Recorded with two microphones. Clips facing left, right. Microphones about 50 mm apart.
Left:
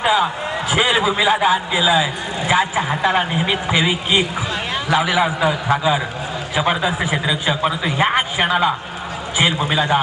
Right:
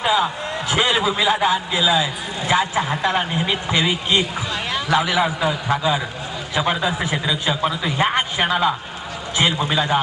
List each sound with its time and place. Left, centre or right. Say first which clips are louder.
0.0 s a man's voice: left 2 dB; centre